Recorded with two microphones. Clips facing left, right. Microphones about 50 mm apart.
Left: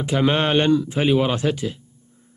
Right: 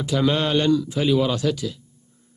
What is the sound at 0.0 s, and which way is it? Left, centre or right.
Speech, left.